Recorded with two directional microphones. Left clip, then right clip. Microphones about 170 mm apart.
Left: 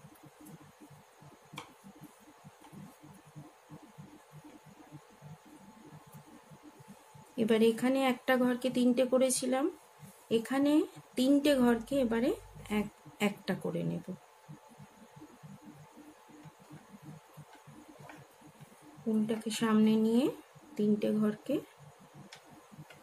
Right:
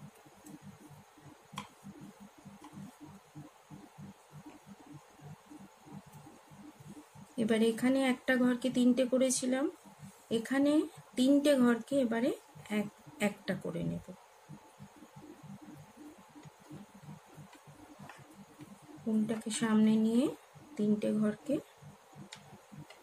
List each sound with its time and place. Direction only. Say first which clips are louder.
7.3 s speech: left 3 dB; 30° left (ahead or behind)
19.2 s speech: left 2 dB; 30° left (ahead or behind)